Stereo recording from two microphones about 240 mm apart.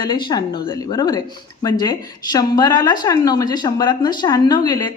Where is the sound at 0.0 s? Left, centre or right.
Centre.